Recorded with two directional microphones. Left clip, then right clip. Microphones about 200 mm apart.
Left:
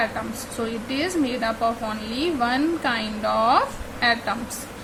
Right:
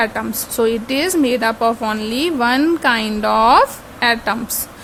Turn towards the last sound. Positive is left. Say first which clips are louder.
# right 5 dB
turn(degrees=-55)  # may be behind; listen again after turning